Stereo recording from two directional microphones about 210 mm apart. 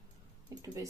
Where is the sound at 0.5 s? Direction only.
15° right (ahead or behind).